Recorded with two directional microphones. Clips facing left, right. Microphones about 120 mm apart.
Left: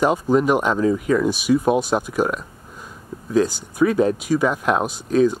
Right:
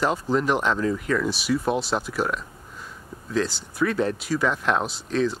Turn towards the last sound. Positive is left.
turn(degrees=15)  # may be behind; listen again after turning